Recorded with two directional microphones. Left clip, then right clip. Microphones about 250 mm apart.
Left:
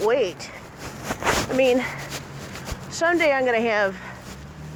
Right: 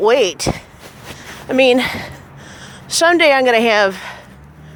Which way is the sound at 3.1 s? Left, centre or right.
Right.